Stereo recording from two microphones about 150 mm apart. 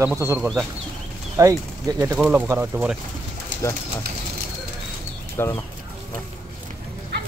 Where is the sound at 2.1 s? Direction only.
10° right (ahead or behind).